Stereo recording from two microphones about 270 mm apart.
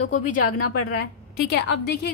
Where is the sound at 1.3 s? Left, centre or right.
Left.